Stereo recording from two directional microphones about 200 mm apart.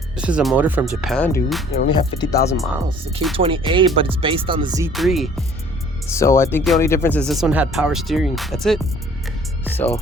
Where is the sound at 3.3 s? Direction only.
25° right (ahead or behind).